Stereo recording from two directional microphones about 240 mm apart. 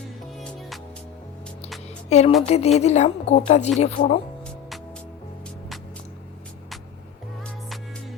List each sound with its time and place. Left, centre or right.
2.0 s speech: left